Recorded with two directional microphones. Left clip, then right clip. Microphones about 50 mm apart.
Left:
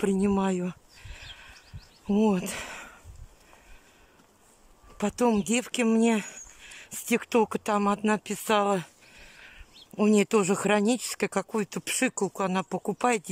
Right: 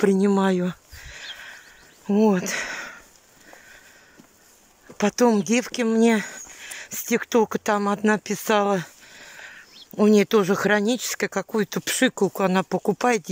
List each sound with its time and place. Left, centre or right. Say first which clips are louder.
0.1 s a sound: right 6 dB; centre
2.0 s speech: right 5 dB; left
2.3 s speech: right 7 dB; left
4.9 s speech: right 6 dB; centre
6.6 s a sound: right 11 dB; centre
6.9 s speech: right 4 dB; centre
8.1 s a sound: right 5 dB; centre
9.9 s speech: right 5 dB; left
10.9 s speech: right 3 dB; left; by 12.3 s centre
12.4 s speech: right 6 dB; centre
12.6 s speech: right 5 dB; centre